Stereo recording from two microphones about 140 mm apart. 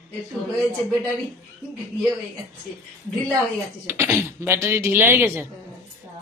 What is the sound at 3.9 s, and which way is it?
Speech, 20° right (ahead or behind).